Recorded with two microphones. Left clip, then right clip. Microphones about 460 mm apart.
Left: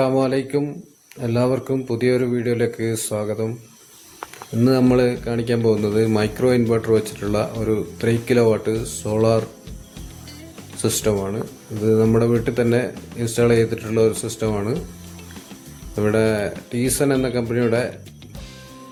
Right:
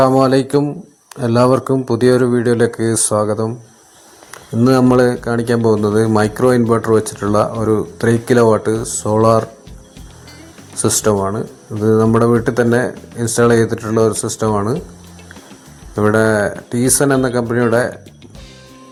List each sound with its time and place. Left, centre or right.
0.0 s speech: left
2.6 s speech: left
4.6 s speech: left
10.8 s speech: left
16.0 s speech: left